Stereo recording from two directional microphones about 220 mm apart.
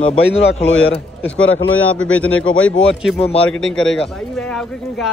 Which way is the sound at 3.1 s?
Centre (ahead or behind).